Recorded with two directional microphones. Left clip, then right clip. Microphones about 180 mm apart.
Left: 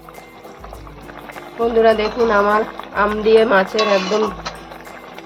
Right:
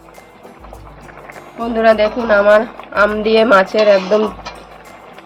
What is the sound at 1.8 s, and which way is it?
A woman's voice, 55° right (ahead or behind).